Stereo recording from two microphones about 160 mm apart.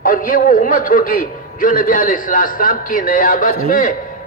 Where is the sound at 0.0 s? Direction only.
60° left (ahead or behind).